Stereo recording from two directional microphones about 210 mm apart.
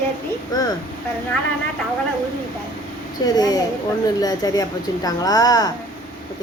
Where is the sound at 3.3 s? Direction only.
20° left (ahead or behind).